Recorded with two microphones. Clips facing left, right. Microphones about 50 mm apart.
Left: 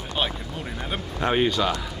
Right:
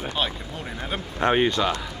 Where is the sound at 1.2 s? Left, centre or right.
Right.